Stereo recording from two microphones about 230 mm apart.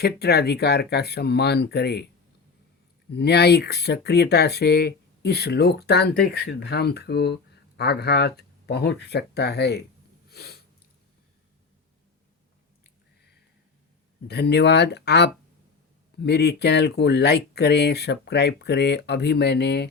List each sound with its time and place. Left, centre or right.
0.0 s speech: left
3.1 s speech: left
10.2 s a sound: left
14.3 s speech: left